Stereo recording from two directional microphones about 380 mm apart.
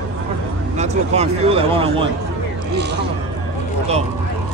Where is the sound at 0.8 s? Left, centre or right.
Centre.